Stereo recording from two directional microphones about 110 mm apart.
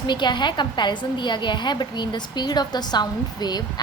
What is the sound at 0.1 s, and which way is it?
A woman's voice, 45° left (ahead or behind).